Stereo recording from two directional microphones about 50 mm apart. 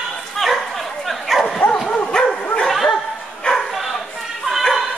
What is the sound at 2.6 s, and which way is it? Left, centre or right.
Dog, centre.